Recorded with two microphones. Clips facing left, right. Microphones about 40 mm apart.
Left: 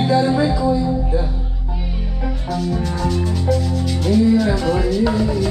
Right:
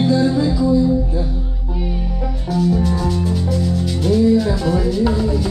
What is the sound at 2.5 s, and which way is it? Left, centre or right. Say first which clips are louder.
Music: right 5 dB; centre.